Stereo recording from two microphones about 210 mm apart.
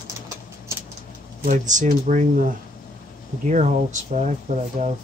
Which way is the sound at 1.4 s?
35° right (ahead or behind).